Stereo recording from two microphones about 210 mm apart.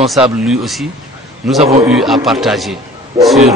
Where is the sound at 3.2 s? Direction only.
15° right (ahead or behind).